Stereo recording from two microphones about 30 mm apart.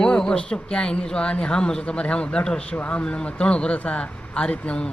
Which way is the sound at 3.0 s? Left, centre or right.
Left.